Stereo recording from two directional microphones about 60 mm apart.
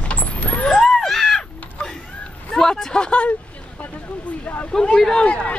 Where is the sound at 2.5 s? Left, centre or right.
Centre.